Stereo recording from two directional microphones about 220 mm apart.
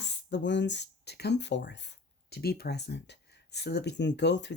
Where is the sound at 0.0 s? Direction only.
55° left (ahead or behind).